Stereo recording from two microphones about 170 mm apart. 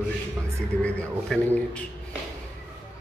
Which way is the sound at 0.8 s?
10° left (ahead or behind).